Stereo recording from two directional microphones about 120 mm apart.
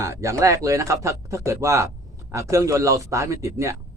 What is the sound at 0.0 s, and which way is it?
Speech, 25° right (ahead or behind).